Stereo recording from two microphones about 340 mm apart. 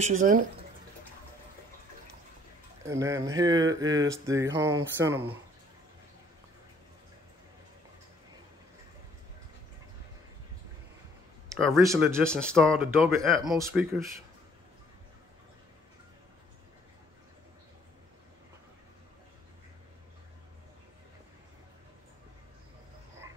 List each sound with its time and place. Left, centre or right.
0.0 s speech: right
2.8 s speech: centre
11.4 s speech: centre